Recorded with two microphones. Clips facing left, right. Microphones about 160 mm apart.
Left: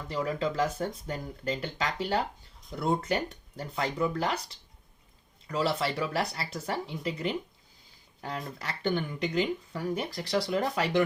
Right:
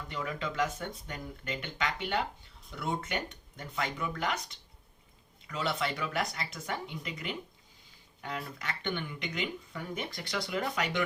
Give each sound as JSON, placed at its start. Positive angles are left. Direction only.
{"t": 0.1, "sound": "speech", "side_deg": 35}